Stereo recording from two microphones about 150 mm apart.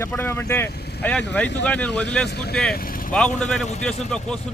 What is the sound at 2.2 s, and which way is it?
Speech, 90° left.